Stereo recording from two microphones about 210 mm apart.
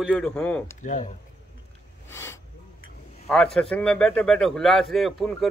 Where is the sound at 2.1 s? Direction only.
15° left (ahead or behind).